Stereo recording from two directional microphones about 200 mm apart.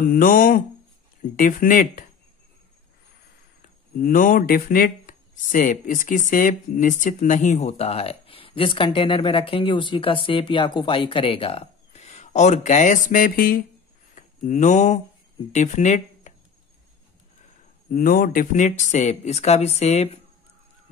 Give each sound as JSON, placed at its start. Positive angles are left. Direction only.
{"t": 0.1, "sound": "speech", "side_deg": 45}
{"t": 3.6, "sound": "speech", "side_deg": 45}
{"t": 17.8, "sound": "speech", "side_deg": 45}